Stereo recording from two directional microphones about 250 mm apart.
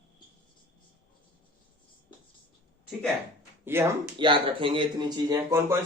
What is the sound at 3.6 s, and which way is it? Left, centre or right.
Speech, centre.